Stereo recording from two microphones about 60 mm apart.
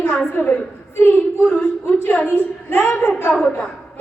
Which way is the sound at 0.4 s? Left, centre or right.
Left.